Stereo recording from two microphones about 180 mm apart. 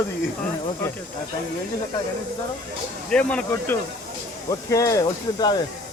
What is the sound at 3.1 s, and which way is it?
Speech, 5° left (ahead or behind).